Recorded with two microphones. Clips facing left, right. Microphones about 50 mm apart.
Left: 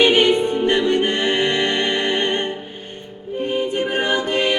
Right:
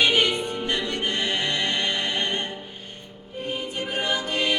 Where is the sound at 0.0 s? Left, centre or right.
Left.